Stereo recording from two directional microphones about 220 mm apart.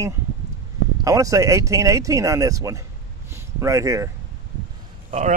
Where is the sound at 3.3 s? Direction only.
10° right (ahead or behind).